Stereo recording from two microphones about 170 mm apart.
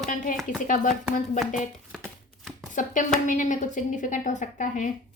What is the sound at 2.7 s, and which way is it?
A woman's voice, 50° left (ahead or behind).